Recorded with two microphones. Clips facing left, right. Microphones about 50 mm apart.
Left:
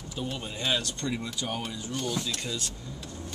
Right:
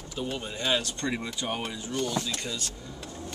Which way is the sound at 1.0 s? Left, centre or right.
Right.